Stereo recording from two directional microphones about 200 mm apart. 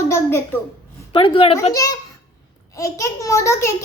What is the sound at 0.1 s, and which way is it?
Speech, 10° left (ahead or behind).